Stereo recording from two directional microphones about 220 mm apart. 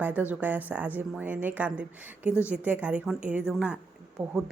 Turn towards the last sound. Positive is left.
turn(degrees=-5)  # may be behind; listen again after turning